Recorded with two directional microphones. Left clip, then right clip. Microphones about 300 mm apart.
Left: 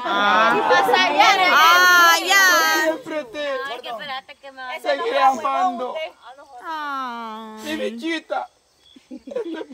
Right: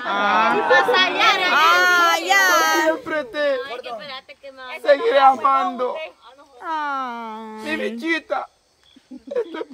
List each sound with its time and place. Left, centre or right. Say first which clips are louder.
0.1 s speech: left 1 dB; centre
0.9 s speech: left 1 dB; centre
1.5 s child singing: left 2 dB; centre
3.6 s a sound: left 2 dB; centre
4.8 s a woman's voice: right 4 dB; centre